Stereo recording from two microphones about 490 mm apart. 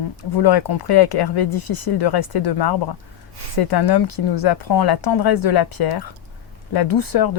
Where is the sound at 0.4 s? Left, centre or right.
Left.